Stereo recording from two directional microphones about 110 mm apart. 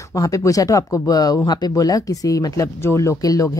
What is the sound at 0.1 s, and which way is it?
Speech, 30° left (ahead or behind).